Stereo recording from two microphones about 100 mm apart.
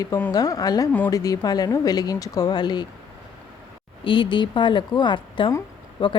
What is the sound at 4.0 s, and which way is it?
A woman's voice, 60° left (ahead or behind).